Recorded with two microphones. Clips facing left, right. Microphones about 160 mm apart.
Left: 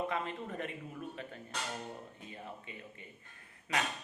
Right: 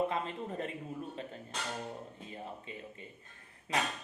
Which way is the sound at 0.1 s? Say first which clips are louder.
Right 1 dB; 30° right (ahead or behind).